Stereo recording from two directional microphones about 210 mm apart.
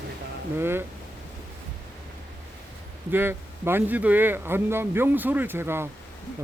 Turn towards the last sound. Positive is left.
turn(degrees=-10)  # may be behind; listen again after turning